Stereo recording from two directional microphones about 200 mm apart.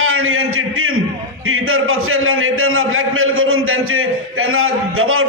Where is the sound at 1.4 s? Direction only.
90° right.